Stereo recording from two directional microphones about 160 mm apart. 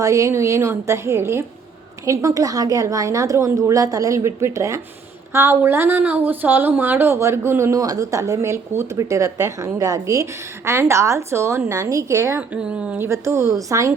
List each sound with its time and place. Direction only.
0.0 s a woman's voice: 20° right (ahead or behind)